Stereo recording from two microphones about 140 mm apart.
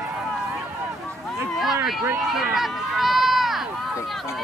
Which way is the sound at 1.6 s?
Centre (ahead or behind).